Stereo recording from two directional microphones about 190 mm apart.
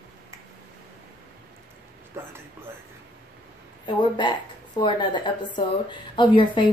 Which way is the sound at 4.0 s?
25° left (ahead or behind).